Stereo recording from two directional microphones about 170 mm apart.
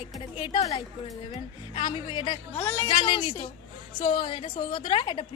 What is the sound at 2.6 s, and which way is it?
Speech, 15° left (ahead or behind).